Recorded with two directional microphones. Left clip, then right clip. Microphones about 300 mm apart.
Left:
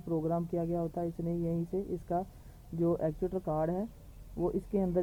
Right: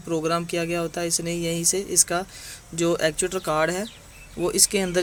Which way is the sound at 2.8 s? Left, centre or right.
Right.